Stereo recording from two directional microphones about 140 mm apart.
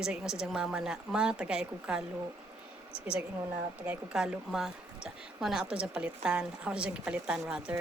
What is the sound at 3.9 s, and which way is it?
Speech, 5° right (ahead or behind).